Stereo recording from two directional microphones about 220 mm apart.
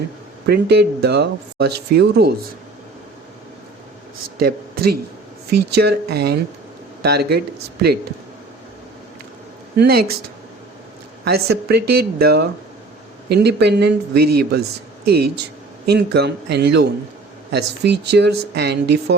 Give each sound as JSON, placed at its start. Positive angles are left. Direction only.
{"t": 0.4, "sound": "speech", "side_deg": -45}
{"t": 4.4, "sound": "speech", "side_deg": -45}
{"t": 9.7, "sound": "speech", "side_deg": -45}
{"t": 11.3, "sound": "speech", "side_deg": -45}